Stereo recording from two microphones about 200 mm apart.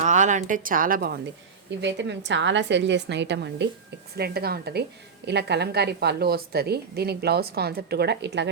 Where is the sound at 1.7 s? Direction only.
60° right (ahead or behind).